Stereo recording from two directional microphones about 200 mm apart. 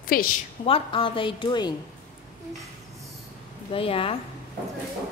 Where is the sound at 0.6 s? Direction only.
25° left (ahead or behind).